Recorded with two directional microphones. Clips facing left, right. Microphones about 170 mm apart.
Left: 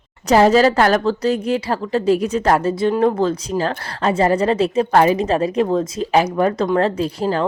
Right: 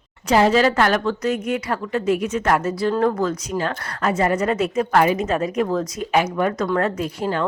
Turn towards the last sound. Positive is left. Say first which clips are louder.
# left 4 dB
turn(degrees=35)  # may be behind; listen again after turning